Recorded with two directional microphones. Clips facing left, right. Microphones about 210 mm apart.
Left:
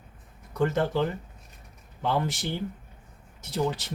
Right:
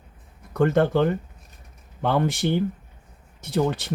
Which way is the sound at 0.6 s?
60° right (ahead or behind).